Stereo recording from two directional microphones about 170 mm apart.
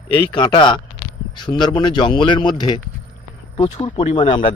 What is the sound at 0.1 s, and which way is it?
Speech, 30° left (ahead or behind).